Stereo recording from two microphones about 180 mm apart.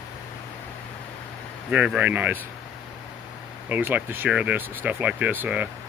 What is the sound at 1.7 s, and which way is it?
Speech, 5° right (ahead or behind).